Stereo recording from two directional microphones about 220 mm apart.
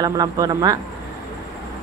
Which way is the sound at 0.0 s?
15° right (ahead or behind).